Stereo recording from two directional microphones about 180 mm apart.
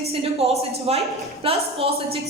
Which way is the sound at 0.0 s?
35° right (ahead or behind).